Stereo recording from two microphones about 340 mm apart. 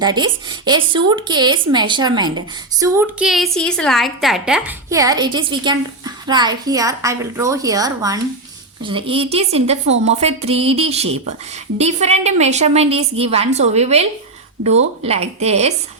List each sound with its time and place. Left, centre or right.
0.0 s a woman's voice: centre